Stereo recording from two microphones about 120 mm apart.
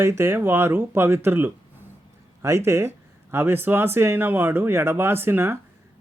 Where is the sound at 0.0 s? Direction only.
20° right (ahead or behind).